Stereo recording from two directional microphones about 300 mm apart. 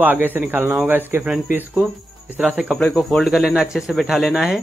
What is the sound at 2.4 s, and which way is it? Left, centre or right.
Speech, centre.